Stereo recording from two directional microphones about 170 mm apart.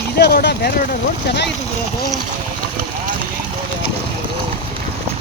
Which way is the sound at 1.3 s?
90° left.